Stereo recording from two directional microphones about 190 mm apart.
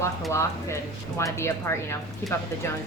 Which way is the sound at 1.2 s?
15° left (ahead or behind).